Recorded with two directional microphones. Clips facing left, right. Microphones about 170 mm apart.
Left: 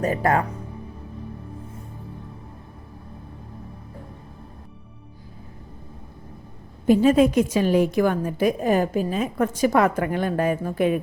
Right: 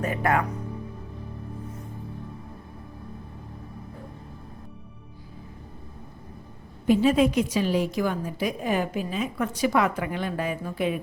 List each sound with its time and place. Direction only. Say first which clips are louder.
0.0 s speech: left 3 dB; 35° left (ahead or behind)
6.8 s a woman's voice: left 4 dB; 45° left (ahead or behind)